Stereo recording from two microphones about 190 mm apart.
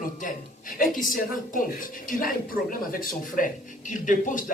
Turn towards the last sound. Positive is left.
turn(degrees=45)  # may be behind; listen again after turning